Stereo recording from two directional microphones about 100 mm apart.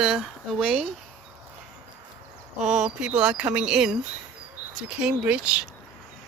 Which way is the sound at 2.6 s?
5° right (ahead or behind).